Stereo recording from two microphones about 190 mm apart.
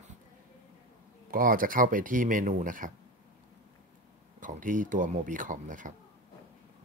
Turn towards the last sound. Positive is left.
turn(degrees=-45)  # may be behind; listen again after turning